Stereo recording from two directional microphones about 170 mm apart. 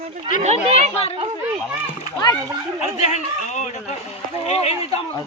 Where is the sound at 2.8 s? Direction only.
40° left (ahead or behind).